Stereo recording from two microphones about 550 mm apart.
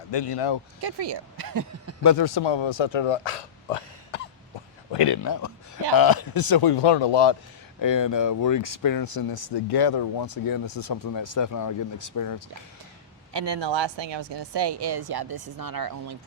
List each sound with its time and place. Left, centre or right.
0.1 s speech: left
0.8 s speech: right
2.0 s speech: left
4.9 s speech: left
7.8 s speech: left
13.3 s speech: right